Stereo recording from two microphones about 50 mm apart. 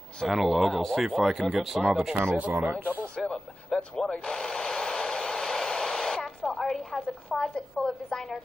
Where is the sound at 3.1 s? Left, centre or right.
Centre.